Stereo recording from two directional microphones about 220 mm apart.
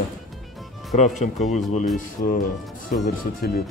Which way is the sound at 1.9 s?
40° left (ahead or behind).